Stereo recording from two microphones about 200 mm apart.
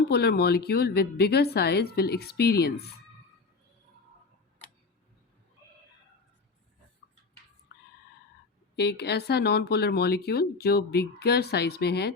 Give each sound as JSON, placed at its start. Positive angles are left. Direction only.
{"t": 0.1, "sound": "speech", "side_deg": 55}
{"t": 7.7, "sound": "a sound", "side_deg": 60}
{"t": 8.7, "sound": "speech", "side_deg": 55}